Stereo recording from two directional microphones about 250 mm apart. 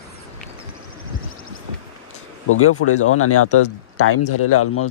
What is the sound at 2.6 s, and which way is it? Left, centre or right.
Speech, left.